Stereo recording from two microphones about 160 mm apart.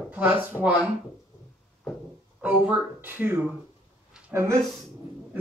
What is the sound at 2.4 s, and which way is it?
Speech, 5° right (ahead or behind).